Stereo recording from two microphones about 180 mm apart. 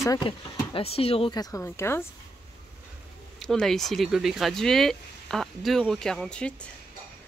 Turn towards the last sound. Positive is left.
turn(degrees=5)  # may be behind; listen again after turning